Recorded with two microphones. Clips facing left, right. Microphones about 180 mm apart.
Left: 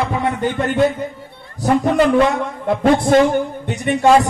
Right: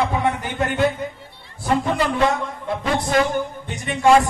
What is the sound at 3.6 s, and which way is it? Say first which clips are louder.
Speech: left 9 dB; 65° left (ahead or behind).